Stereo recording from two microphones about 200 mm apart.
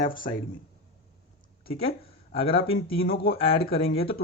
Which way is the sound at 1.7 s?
30° left (ahead or behind).